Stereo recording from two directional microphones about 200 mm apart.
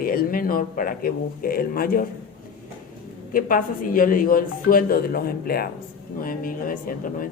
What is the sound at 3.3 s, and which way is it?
Speech, 45° left (ahead or behind).